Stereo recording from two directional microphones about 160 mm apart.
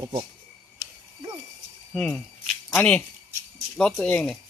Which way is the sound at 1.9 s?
5° left (ahead or behind).